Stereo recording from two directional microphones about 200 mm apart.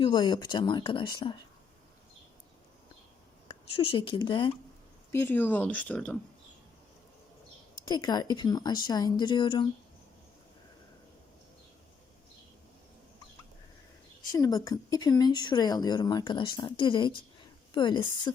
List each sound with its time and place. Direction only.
0.0 s speech: 25° left (ahead or behind)
3.5 s speech: 25° left (ahead or behind)
5.1 s speech: 10° left (ahead or behind)
7.9 s speech: 20° left (ahead or behind)
14.3 s speech: 20° left (ahead or behind)